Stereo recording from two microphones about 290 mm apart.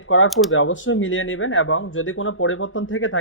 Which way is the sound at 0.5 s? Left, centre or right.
Left.